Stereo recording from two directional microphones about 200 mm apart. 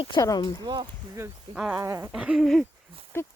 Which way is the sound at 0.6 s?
20° right (ahead or behind).